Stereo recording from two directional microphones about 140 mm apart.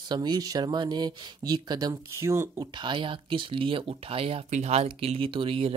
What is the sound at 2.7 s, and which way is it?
Speech, 35° right (ahead or behind).